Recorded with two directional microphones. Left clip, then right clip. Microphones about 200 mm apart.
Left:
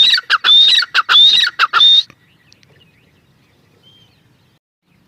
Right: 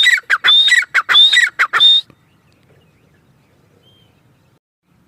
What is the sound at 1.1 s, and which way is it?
Fowl, 10° right (ahead or behind).